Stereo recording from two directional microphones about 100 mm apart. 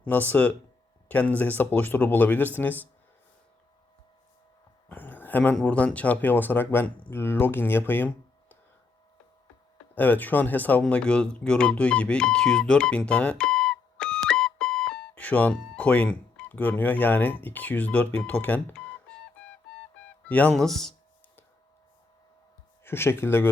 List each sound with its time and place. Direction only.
0.0 s speech: 15° left (ahead or behind)
4.9 s a sound: 20° left (ahead or behind)
5.5 s speech: 10° left (ahead or behind)
9.9 s speech: 15° left (ahead or behind)
20.2 s speech: 15° left (ahead or behind)
20.6 s speech: 5° left (ahead or behind)
22.8 s speech: 25° left (ahead or behind)